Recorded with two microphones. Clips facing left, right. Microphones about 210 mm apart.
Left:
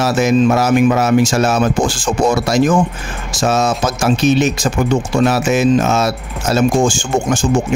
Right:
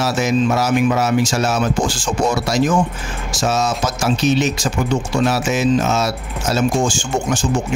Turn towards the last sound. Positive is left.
turn(degrees=50)  # may be behind; listen again after turning